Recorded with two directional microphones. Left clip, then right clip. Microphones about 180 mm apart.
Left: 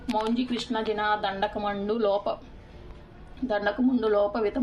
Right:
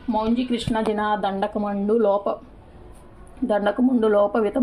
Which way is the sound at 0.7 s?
35° right (ahead or behind).